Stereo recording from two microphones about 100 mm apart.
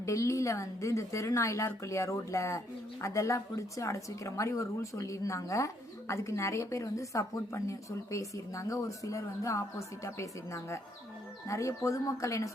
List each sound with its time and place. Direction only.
0.0 s speech: 30° left (ahead or behind)